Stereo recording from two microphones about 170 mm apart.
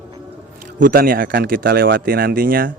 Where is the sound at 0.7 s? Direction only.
55° right (ahead or behind).